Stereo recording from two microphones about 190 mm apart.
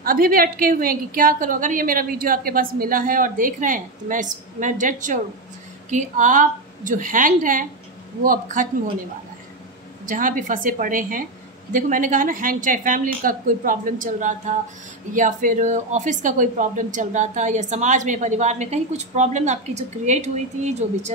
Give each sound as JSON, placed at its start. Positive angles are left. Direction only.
{"t": 0.0, "sound": "a woman's voice", "side_deg": -50}
{"t": 10.0, "sound": "a woman's voice", "side_deg": -45}